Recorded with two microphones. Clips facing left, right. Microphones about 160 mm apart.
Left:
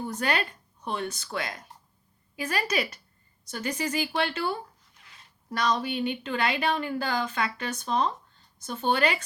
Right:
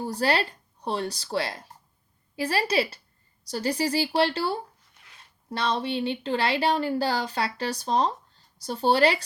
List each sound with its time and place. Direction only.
0.0 s speech: 35° right (ahead or behind)